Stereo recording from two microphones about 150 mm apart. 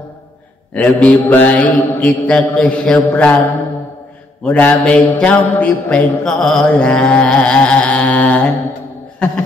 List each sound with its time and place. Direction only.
0.7 s mantra: 10° left (ahead or behind)
4.4 s mantra: 10° left (ahead or behind)